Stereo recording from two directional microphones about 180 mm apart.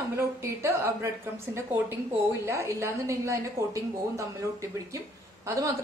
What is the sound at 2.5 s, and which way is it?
A woman's voice, 15° right (ahead or behind).